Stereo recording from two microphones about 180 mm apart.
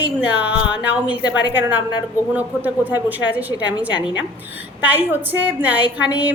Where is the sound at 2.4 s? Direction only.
10° right (ahead or behind).